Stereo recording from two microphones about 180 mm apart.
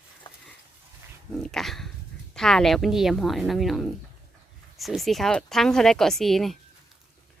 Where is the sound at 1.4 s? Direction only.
Centre (ahead or behind).